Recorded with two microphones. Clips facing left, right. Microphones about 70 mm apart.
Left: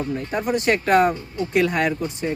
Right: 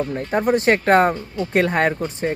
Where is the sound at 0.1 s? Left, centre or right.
Right.